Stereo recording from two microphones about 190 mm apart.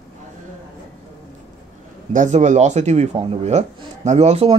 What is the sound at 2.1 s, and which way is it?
Speech, 40° right (ahead or behind).